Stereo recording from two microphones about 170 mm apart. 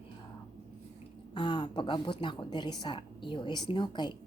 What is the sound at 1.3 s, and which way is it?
A woman's voice, 25° left (ahead or behind).